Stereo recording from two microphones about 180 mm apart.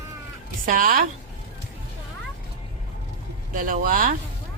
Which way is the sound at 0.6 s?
45° right (ahead or behind).